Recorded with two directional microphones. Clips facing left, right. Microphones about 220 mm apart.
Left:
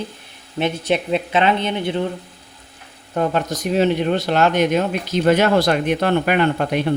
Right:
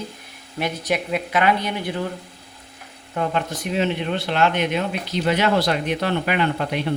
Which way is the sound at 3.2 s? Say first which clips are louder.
Left 4 dB; 40° left (ahead or behind).